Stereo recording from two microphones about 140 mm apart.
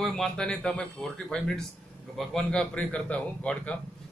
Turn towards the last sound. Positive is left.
turn(degrees=10)  # may be behind; listen again after turning